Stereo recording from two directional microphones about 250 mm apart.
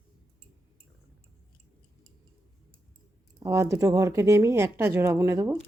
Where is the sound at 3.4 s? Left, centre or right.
Centre.